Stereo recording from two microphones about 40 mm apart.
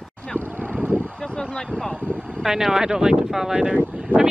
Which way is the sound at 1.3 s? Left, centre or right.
Centre.